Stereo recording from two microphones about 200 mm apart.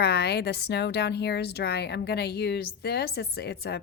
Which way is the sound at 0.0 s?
55° left (ahead or behind).